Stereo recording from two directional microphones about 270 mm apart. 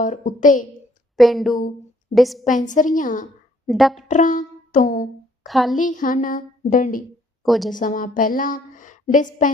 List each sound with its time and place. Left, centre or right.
0.0 s a woman's voice: left
1.1 s a woman's voice: centre
2.4 s a woman's voice: left
3.7 s speech: centre
4.1 s a sound: left
5.5 s speech: centre
5.7 s a woman's voice: left
7.4 s a woman's voice: centre
7.7 s a woman's voice: left